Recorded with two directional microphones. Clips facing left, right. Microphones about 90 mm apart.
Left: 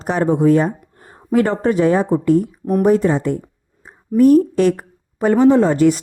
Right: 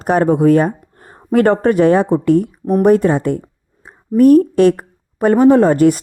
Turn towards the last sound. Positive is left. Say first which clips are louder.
# right 3 dB
turn(degrees=-50)  # may be behind; listen again after turning